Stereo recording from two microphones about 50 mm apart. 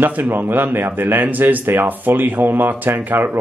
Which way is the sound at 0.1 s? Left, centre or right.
Right.